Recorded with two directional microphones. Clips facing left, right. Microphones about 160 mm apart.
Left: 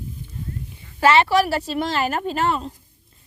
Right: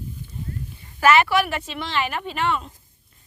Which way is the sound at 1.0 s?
30° left (ahead or behind).